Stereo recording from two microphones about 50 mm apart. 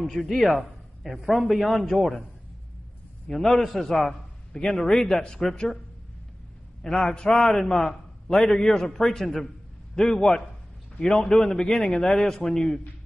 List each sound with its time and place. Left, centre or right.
0.0 s a man's voice: centre
3.3 s a man's voice: centre
6.8 s a man's voice: centre